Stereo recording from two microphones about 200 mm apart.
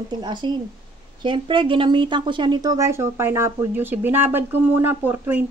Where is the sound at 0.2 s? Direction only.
20° right (ahead or behind).